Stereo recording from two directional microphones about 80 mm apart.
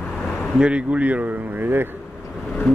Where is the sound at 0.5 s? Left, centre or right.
Centre.